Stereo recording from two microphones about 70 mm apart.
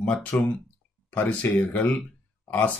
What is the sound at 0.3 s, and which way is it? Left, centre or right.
Speech, left.